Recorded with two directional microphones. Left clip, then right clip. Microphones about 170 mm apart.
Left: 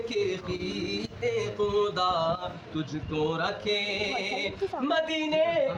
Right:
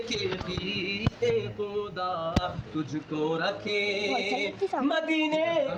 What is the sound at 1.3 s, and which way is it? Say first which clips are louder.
Mantra: left 3 dB; 60° left (ahead or behind).